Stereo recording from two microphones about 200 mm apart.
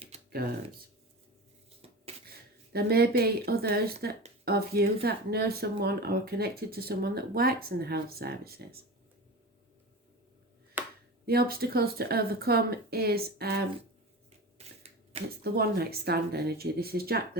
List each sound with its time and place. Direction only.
2.7 s speech: 50° right (ahead or behind)
10.8 s a sound: 10° right (ahead or behind)
11.3 s speech: 50° right (ahead or behind)
15.5 s speech: 50° right (ahead or behind)